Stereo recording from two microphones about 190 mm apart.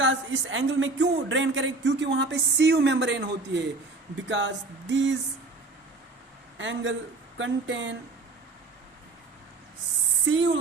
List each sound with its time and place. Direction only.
0.0 s speech: 80° right
6.6 s speech: 75° right (ahead or behind)
10.2 s speech: 80° right